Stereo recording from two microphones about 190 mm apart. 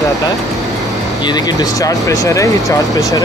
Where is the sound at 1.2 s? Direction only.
20° left (ahead or behind).